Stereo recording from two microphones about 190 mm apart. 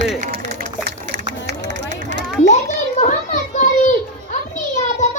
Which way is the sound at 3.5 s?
40° left (ahead or behind).